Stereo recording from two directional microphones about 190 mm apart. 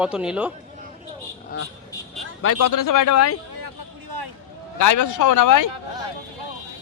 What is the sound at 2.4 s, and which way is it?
Speech, 90° left.